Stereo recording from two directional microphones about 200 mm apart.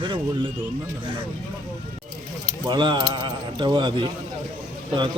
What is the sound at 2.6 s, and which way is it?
A man's voice, 25° right (ahead or behind).